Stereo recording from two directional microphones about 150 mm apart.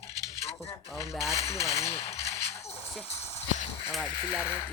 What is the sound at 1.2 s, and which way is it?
Speech, 20° left (ahead or behind).